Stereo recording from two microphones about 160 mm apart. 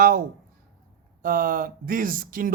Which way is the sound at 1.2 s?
60° right (ahead or behind).